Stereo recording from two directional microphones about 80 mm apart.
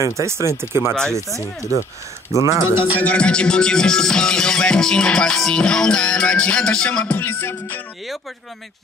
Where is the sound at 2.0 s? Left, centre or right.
Right.